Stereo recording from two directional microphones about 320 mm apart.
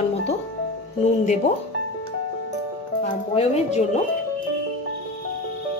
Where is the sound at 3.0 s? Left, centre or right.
Centre.